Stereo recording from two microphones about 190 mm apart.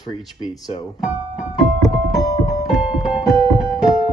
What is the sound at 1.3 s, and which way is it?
Music, centre (ahead or behind).